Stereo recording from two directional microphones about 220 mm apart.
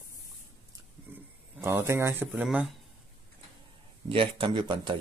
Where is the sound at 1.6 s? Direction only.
10° right (ahead or behind).